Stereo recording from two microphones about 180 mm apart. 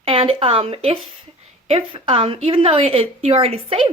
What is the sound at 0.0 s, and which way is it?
A woman's voice, 30° right (ahead or behind).